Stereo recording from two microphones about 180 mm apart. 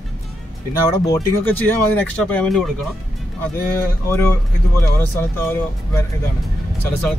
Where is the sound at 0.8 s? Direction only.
20° left (ahead or behind).